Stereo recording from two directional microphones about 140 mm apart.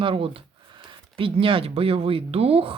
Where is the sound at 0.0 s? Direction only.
40° right (ahead or behind).